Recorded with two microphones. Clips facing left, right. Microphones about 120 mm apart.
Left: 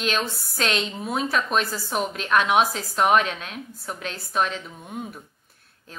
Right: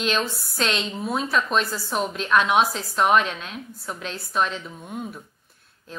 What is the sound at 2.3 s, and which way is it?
Speech, 50° left (ahead or behind).